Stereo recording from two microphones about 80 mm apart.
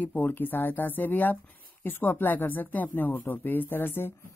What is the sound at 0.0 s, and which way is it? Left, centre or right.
Speech, left.